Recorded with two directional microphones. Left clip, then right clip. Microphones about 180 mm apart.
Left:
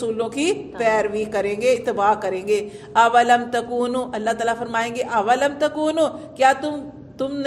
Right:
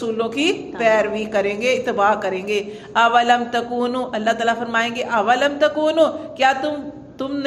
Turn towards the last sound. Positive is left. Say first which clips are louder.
# even
turn(degrees=40)  # may be behind; listen again after turning